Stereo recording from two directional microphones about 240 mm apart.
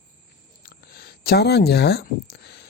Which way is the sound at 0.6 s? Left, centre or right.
Left.